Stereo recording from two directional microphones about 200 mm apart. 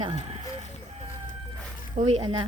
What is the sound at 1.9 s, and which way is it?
Speech, 30° right (ahead or behind).